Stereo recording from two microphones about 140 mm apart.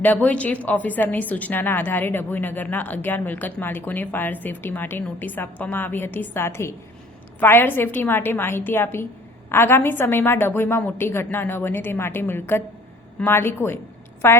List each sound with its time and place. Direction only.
0.0 s a woman's voice: 10° left (ahead or behind)